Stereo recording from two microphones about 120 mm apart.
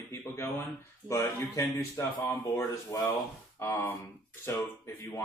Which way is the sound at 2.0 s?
25° left (ahead or behind).